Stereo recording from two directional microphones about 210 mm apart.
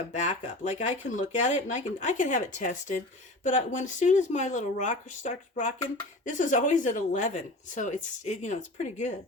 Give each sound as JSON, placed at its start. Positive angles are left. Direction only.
{"t": 0.1, "sound": "speech", "side_deg": 35}